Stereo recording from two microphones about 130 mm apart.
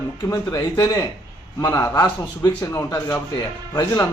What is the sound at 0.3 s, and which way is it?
Speech, 25° left (ahead or behind).